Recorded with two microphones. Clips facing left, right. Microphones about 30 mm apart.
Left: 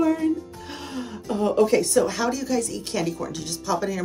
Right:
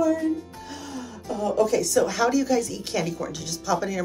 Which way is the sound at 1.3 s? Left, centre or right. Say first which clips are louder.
Left 3 dB; left.